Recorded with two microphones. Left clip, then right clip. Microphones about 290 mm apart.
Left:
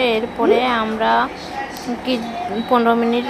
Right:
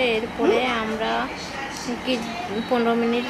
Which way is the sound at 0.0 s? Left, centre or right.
Centre.